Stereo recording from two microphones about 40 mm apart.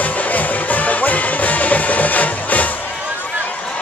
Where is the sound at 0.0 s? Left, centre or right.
Left.